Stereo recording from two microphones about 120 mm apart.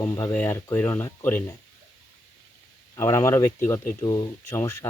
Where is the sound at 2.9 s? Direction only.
25° left (ahead or behind).